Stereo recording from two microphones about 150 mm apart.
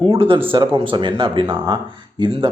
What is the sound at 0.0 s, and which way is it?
Speech, 35° right (ahead or behind).